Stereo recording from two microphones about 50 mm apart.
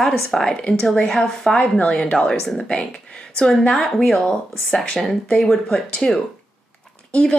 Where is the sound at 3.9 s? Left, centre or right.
Centre.